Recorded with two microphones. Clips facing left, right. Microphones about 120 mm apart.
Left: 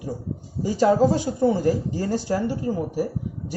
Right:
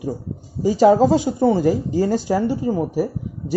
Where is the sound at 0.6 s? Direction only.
90° right.